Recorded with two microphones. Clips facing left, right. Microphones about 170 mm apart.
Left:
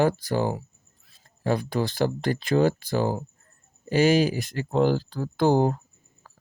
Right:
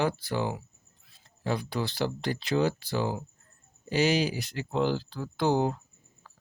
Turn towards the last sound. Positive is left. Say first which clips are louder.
# left 5 dB
turn(degrees=45)  # may be behind; listen again after turning